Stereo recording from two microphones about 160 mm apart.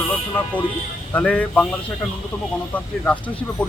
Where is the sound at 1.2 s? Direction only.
10° left (ahead or behind).